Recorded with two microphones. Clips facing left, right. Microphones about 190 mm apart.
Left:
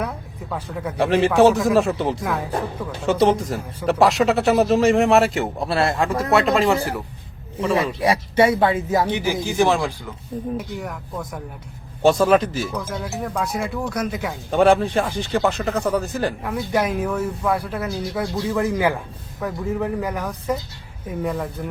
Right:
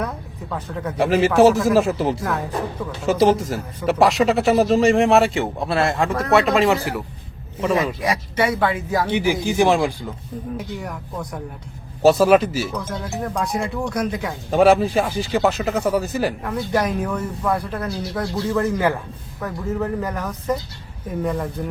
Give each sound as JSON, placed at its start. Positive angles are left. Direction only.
{"t": 0.0, "sound": "speech", "side_deg": 10}
{"t": 8.0, "sound": "speech", "side_deg": 30}
{"t": 9.1, "sound": "speech", "side_deg": -15}
{"t": 10.7, "sound": "speech", "side_deg": 0}
{"t": 16.4, "sound": "speech", "side_deg": 5}